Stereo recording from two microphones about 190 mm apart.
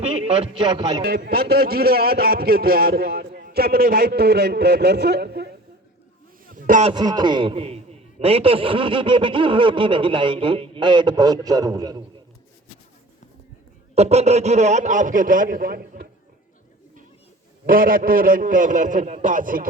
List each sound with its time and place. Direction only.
0.3 s a man's voice: 25° right (ahead or behind)
1.0 s a man's voice: 55° right (ahead or behind)
6.5 s a sound: 45° right (ahead or behind)
6.9 s a man's voice: 20° right (ahead or behind)
13.9 s a man's voice: 35° right (ahead or behind); by 16.0 s 50° right (ahead or behind)
17.7 s a man's voice: 50° right (ahead or behind)